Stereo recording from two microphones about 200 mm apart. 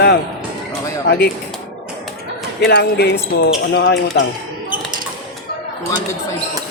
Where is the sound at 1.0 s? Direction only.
50° left (ahead or behind).